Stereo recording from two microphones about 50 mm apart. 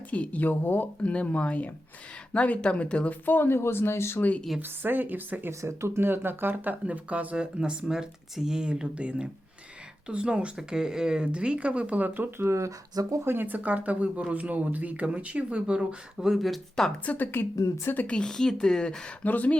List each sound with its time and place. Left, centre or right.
0.1 s speech: left
1.0 s speech: left
3.1 s speech: left
4.6 s speech: right
5.5 s speech: right
6.1 s speech: right
6.8 s speech: right
7.3 s speech: centre; by 12.3 s right
12.4 s speech: right
13.2 s speech: right
16.1 s speech: centre
17.3 s speech: left
18.0 s speech: centre
19.2 s speech: left